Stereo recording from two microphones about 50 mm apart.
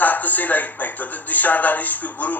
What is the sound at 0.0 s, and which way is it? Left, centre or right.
Speech, left.